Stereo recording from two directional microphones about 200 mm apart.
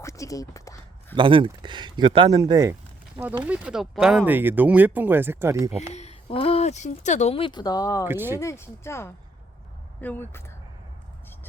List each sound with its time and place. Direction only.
0.0 s a sound: 15° left (ahead or behind)
1.1 s speech: 25° right (ahead or behind)
3.4 s speech: 5° right (ahead or behind)
5.9 s speech: 35° left (ahead or behind)
8.0 s speech: 10° right (ahead or behind)
8.4 s speech: 15° left (ahead or behind)